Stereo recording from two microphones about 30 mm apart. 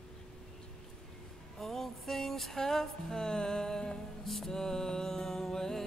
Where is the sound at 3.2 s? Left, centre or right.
Left.